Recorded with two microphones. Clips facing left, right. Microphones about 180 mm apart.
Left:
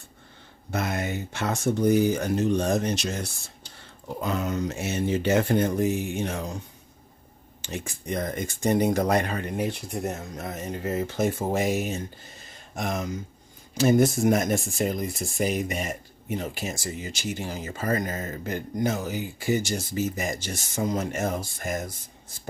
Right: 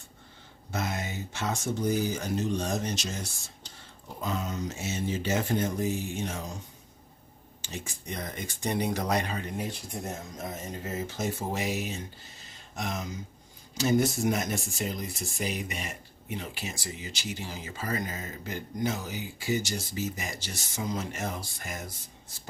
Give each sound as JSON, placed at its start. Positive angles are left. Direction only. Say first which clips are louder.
{"t": 0.7, "sound": "speech", "louder": "left 5 dB", "side_deg": 60}
{"t": 7.6, "sound": "speech", "louder": "left 5 dB", "side_deg": 55}